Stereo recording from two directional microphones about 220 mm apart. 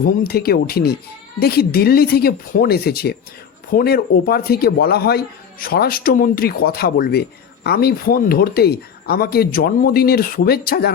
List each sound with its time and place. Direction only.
0.0 s speech: 45° left (ahead or behind)